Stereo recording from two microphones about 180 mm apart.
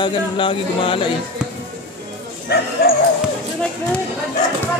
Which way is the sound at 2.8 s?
60° left (ahead or behind).